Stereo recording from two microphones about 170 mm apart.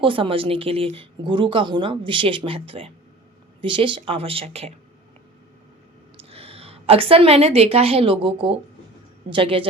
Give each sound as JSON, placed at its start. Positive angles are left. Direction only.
{"t": 0.0, "sound": "speech", "side_deg": -30}
{"t": 6.1, "sound": "a woman's voice", "side_deg": -35}